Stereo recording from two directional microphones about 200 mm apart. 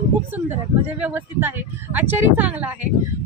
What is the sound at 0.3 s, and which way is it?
Speech, 10° right (ahead or behind).